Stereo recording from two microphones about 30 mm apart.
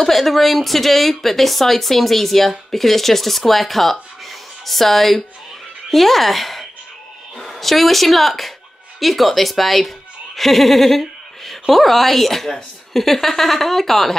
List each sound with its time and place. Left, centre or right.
0.0 s a woman's voice: centre